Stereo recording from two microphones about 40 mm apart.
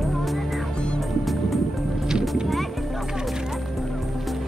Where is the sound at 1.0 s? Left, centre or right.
Centre.